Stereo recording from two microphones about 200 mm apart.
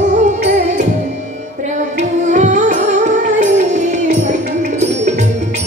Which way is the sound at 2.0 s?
40° right (ahead or behind).